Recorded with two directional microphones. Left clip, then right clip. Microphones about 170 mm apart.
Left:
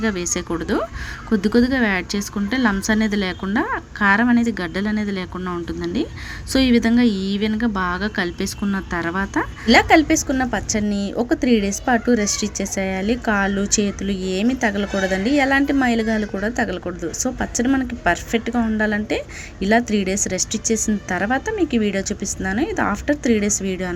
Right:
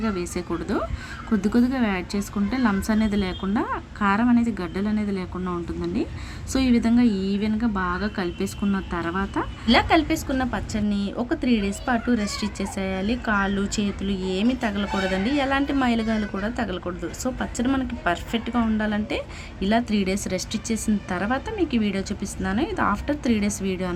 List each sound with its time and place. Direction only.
0.0 s a woman's voice: 20° left (ahead or behind)